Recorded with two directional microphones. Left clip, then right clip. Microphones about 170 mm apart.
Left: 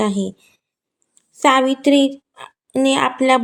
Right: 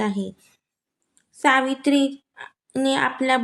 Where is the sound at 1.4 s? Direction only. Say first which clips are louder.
Left 5 dB; 20° left (ahead or behind).